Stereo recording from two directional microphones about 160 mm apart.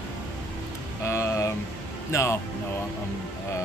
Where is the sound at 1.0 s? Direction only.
20° left (ahead or behind).